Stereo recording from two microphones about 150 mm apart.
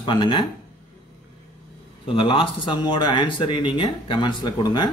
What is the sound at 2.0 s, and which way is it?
Speech, 35° left (ahead or behind).